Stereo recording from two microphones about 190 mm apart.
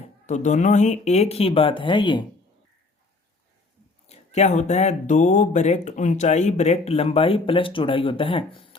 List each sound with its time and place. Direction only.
0.3 s speech: 40° left (ahead or behind)
4.0 s speech: 35° left (ahead or behind)